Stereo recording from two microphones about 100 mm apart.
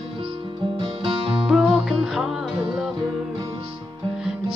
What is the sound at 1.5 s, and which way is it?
Music, 5° right (ahead or behind).